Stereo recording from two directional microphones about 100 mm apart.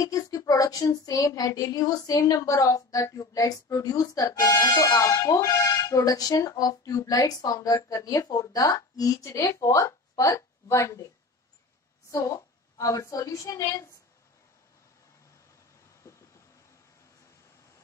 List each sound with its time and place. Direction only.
0.0 s speech: 35° left (ahead or behind)
12.1 s a woman's voice: 30° left (ahead or behind)